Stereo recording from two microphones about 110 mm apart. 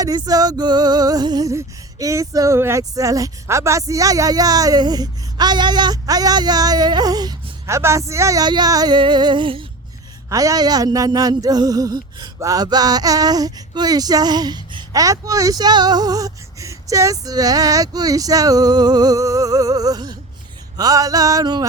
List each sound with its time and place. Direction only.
0.0 s music: 35° right (ahead or behind)
7.8 s speech: 25° right (ahead or behind)
8.4 s music: 40° right (ahead or behind)
10.2 s music: 30° right (ahead or behind)
14.9 s music: 30° right (ahead or behind)